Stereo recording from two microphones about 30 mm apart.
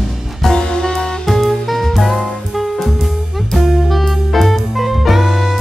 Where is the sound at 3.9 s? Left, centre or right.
Centre.